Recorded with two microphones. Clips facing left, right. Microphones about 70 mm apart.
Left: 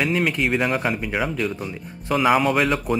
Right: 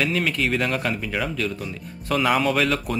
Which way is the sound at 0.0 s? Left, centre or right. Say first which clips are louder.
Left 2 dB; centre.